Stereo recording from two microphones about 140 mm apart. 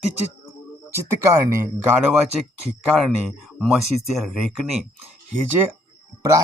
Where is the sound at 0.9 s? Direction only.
20° right (ahead or behind).